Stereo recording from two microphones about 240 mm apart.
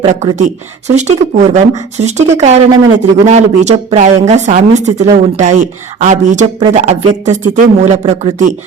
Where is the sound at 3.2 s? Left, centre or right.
Right.